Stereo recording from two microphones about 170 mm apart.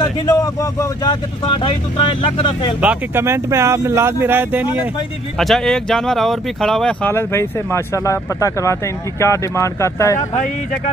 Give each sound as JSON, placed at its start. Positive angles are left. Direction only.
{"t": 0.0, "sound": "speech", "side_deg": 20}
{"t": 2.8, "sound": "speech", "side_deg": -10}
{"t": 5.4, "sound": "speech", "side_deg": 0}
{"t": 10.3, "sound": "speech", "side_deg": 55}